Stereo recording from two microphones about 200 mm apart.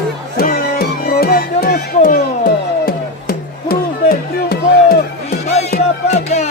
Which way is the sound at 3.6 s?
50° left (ahead or behind).